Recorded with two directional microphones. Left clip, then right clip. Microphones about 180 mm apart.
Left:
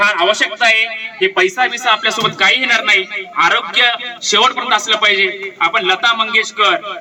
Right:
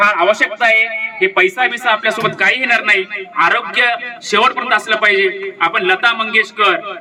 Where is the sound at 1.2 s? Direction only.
25° right (ahead or behind).